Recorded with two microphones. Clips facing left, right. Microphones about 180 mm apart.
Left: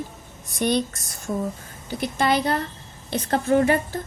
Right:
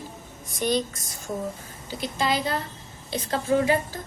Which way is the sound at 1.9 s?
60° left (ahead or behind).